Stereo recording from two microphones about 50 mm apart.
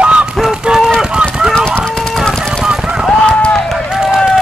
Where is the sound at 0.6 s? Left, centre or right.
Centre.